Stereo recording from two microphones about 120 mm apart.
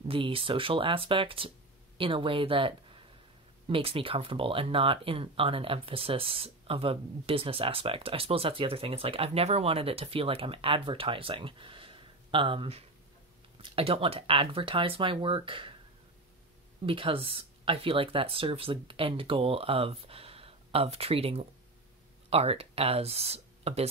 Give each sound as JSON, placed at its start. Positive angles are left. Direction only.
{"t": 0.1, "sound": "speech", "side_deg": -50}
{"t": 16.8, "sound": "speech", "side_deg": -50}